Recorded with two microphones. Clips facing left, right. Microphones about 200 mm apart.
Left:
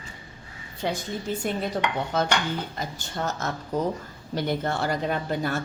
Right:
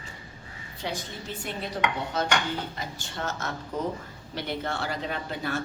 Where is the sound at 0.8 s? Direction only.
50° left (ahead or behind).